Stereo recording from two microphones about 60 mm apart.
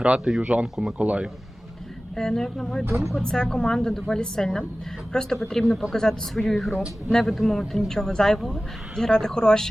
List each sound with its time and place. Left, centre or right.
0.0 s speech: centre
2.1 s a man's voice: centre